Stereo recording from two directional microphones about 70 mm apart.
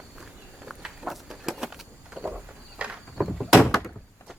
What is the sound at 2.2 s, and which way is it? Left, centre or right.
Walk, centre.